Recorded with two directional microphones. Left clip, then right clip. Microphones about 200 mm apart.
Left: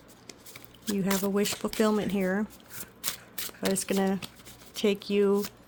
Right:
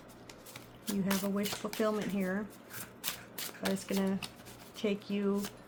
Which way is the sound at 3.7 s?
50° left (ahead or behind).